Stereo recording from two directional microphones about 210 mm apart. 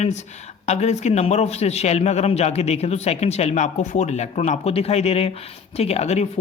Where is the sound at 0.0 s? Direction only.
35° left (ahead or behind).